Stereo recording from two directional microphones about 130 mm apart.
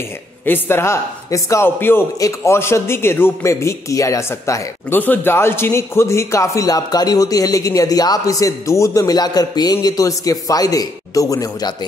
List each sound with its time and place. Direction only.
0.5 s a man's voice: 15° left (ahead or behind)